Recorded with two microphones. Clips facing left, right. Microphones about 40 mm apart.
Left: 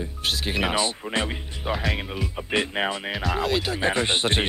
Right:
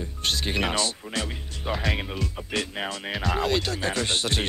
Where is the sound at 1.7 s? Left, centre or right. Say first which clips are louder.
Left 1 dB; centre.